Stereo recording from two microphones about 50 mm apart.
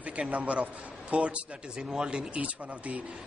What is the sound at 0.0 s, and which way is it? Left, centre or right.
A man's voice, right.